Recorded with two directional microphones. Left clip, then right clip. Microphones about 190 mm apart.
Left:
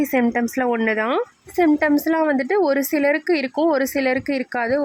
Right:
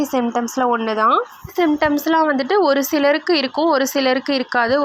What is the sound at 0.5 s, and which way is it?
Speech, 35° left (ahead or behind).